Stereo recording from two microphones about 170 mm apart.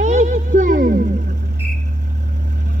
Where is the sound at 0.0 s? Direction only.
45° right (ahead or behind).